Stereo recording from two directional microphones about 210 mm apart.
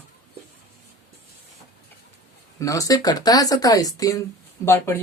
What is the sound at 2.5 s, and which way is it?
Speech, 15° left (ahead or behind).